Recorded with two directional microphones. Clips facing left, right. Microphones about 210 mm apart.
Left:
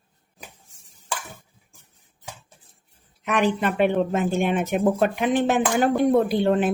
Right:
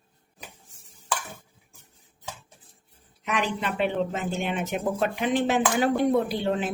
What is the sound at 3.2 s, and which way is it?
Speech, 50° left (ahead or behind).